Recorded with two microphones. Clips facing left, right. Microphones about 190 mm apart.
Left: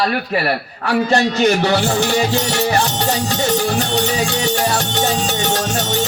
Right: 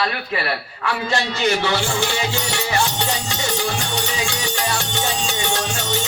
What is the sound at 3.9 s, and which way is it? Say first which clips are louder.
Music: left 7 dB; 40° left (ahead or behind).